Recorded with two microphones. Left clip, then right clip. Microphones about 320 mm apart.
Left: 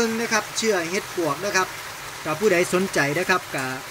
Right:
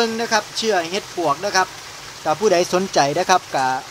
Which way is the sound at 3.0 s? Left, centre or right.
Right.